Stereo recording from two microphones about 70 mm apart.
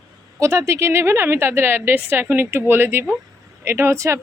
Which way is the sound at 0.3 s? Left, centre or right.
Right.